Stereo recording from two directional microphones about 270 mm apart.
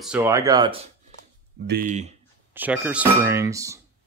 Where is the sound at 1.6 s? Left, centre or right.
Right.